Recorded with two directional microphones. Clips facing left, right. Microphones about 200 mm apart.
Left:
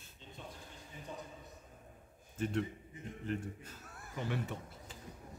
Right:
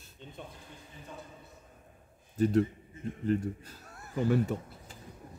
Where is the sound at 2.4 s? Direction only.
40° right (ahead or behind).